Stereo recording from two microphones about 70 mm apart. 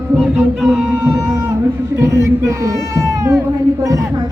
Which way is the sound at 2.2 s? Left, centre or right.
Right.